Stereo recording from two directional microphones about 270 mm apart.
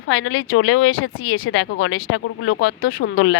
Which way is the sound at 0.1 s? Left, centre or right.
Left.